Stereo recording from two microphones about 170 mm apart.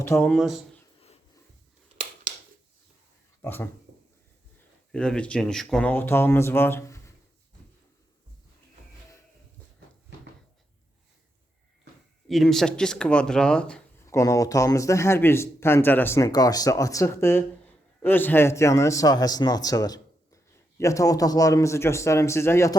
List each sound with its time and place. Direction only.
0.0 s speech: 10° left (ahead or behind)
3.4 s speech: 10° left (ahead or behind)
4.9 s speech: 5° left (ahead or behind)
12.3 s speech: centre (ahead or behind)
14.0 s a man's voice: 15° left (ahead or behind)